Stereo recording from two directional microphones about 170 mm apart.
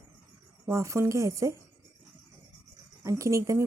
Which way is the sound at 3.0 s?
20° right (ahead or behind).